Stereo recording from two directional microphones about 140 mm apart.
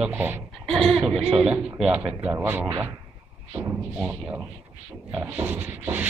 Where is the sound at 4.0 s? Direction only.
5° right (ahead or behind).